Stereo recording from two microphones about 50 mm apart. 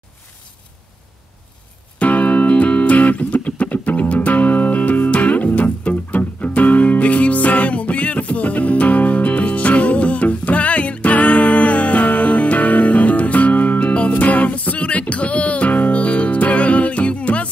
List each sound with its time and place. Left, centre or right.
2.0 s music: left